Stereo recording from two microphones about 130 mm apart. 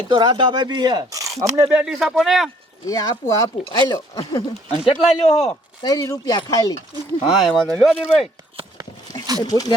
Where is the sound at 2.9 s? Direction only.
25° left (ahead or behind).